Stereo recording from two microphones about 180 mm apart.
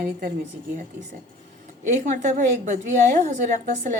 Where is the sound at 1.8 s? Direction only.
40° right (ahead or behind).